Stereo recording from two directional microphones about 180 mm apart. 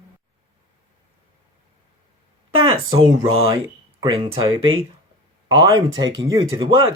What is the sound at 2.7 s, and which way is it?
Speech, 25° right (ahead or behind).